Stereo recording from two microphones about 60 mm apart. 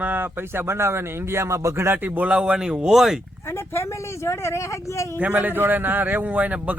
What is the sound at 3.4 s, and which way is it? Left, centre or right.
Speech, left.